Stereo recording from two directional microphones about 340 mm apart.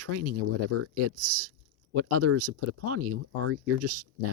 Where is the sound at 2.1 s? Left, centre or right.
Right.